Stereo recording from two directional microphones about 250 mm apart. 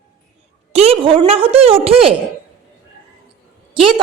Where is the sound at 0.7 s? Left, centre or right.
Right.